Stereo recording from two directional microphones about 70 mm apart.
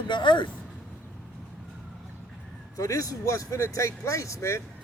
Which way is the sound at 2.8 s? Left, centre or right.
Left.